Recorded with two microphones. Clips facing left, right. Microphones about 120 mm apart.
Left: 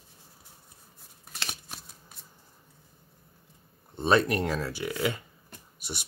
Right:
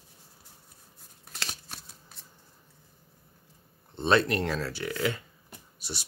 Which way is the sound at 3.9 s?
10° left (ahead or behind).